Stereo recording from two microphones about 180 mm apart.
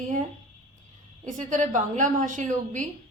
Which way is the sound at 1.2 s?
45° right (ahead or behind).